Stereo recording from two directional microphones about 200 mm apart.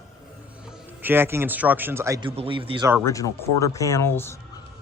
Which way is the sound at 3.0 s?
15° left (ahead or behind).